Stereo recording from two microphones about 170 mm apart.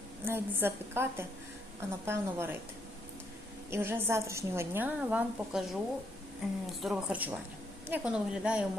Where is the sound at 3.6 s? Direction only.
15° right (ahead or behind).